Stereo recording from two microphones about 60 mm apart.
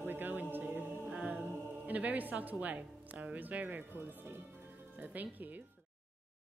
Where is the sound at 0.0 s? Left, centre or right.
Right.